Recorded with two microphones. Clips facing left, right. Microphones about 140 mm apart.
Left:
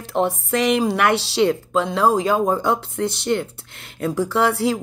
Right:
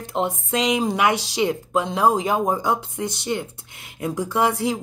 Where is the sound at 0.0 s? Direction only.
20° right (ahead or behind).